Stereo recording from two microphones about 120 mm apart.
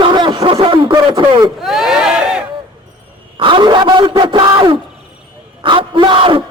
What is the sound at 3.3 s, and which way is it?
A man's voice, 45° right (ahead or behind).